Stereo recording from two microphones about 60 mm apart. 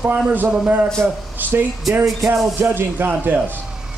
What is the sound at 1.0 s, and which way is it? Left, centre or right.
Speech, right.